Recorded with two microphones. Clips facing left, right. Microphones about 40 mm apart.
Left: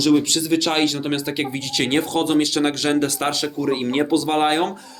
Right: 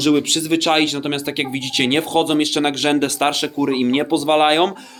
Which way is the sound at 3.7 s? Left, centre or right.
Right.